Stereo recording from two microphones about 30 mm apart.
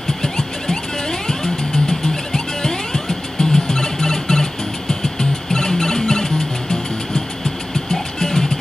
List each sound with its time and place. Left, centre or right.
0.2 s music: centre
7.9 s music: centre